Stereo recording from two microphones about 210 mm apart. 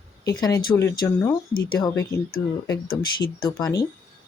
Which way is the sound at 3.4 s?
15° left (ahead or behind).